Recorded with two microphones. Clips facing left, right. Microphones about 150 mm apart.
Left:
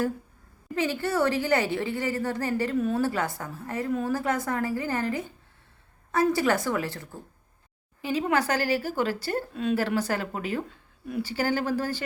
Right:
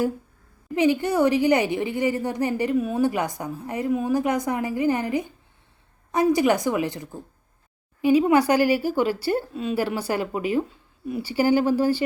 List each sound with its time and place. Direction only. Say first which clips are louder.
0.8 s a woman's voice: right 6 dB; 15° right (ahead or behind)